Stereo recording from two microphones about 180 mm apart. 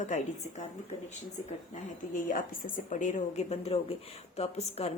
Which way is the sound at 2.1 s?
50° left (ahead or behind).